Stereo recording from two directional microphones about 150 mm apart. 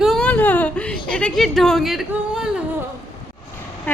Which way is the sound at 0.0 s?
5° left (ahead or behind).